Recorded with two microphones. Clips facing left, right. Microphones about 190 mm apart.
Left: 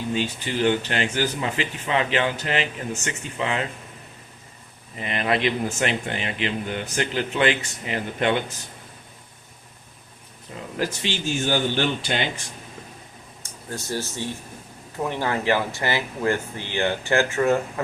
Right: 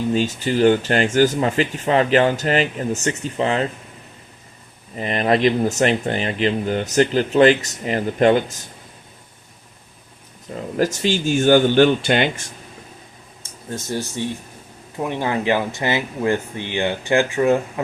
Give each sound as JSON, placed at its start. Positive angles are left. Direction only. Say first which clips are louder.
{"t": 0.1, "sound": "speech", "louder": "right 4 dB", "side_deg": -40}
{"t": 4.9, "sound": "speech", "louder": "right 6 dB", "side_deg": -40}
{"t": 10.8, "sound": "speech", "louder": "right 7 dB", "side_deg": -45}
{"t": 13.4, "sound": "speech", "louder": "right 4 dB", "side_deg": -20}